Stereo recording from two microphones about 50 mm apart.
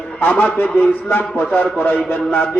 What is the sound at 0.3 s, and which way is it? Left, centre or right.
A man's voice, left.